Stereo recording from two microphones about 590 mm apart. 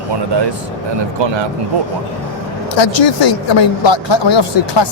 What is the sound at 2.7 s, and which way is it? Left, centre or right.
Speech, left.